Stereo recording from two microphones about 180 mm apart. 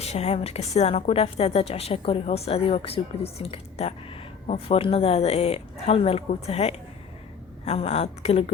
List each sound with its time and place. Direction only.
0.0 s a woman's voice: 35° left (ahead or behind)